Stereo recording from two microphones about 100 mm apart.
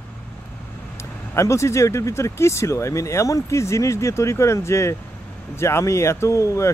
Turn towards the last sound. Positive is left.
turn(degrees=30)  # may be behind; listen again after turning